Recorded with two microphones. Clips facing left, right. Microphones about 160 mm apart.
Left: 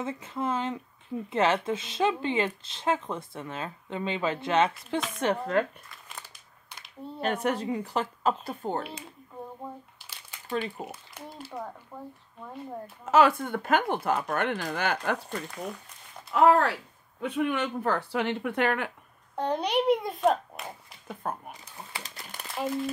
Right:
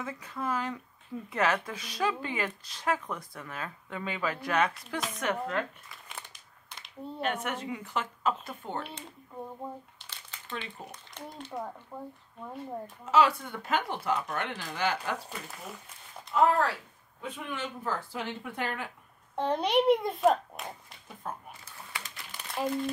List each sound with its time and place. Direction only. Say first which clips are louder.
0.0 s a woman's voice: left 4 dB; 25° left (ahead or behind)
6.0 s crumpling: right 1 dB; centre (ahead or behind)
7.2 s speech: left 5 dB; 35° left (ahead or behind)
8.8 s speech: left 3 dB; 5° left (ahead or behind)
10.9 s speech: left 2 dB; 5° left (ahead or behind)
13.0 s speech: left 4 dB; 50° left (ahead or behind)
16.4 s speech: left 9 dB; 65° left (ahead or behind)
19.3 s a child's voice: even; centre (ahead or behind)
21.1 s a sound: left 5 dB; 55° left (ahead or behind)
21.9 s crumpling: even; 35° left (ahead or behind)
22.5 s speech: even; centre (ahead or behind)